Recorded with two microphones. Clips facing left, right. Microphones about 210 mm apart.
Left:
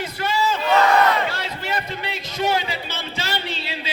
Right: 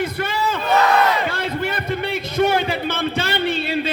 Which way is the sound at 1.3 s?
55° right (ahead or behind).